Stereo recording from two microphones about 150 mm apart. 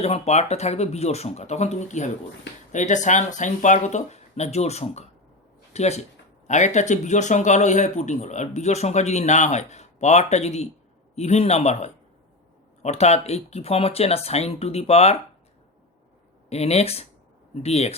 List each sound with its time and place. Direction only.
0.0 s speech: 45° left (ahead or behind)
16.5 s speech: 45° left (ahead or behind)